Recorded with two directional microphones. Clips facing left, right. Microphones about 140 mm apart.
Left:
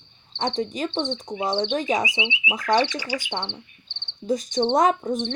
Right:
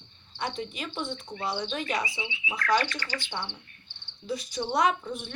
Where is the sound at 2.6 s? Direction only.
15° left (ahead or behind).